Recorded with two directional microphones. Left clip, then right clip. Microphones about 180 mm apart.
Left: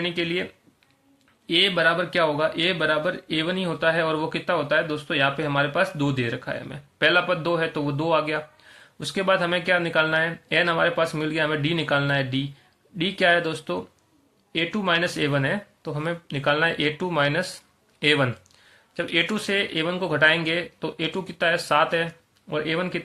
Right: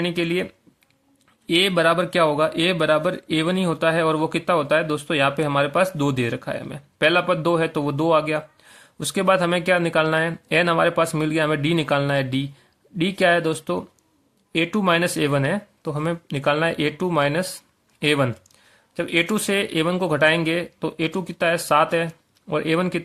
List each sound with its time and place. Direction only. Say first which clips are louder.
0.0 s speech: right 3 dB; 40° right (ahead or behind)
1.5 s speech: right 2 dB; 40° right (ahead or behind)